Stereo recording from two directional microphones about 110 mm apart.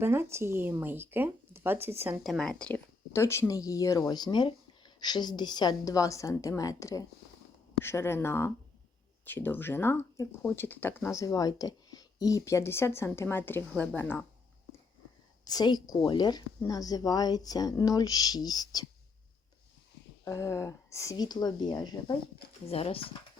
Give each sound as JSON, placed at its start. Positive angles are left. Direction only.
{"t": 0.0, "sound": "speech", "side_deg": -20}
{"t": 2.2, "sound": "speech", "side_deg": 0}
{"t": 3.1, "sound": "speech", "side_deg": 25}
{"t": 15.4, "sound": "speech", "side_deg": 40}
{"t": 20.2, "sound": "speech", "side_deg": 25}
{"t": 22.6, "sound": "speech", "side_deg": 65}